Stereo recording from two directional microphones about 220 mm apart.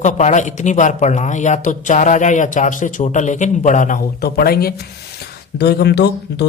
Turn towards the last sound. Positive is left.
turn(degrees=50)  # may be behind; listen again after turning